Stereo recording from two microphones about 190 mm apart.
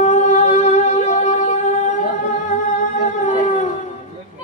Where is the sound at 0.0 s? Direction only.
40° left (ahead or behind).